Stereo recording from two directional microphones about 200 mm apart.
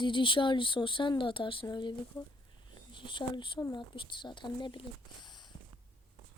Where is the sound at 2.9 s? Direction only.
25° left (ahead or behind).